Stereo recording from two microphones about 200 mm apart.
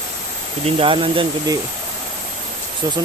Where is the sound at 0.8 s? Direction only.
25° right (ahead or behind).